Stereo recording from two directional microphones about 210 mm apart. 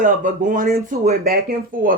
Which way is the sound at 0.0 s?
40° right (ahead or behind).